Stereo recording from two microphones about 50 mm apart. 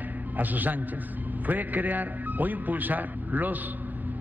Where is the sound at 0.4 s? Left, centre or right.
Right.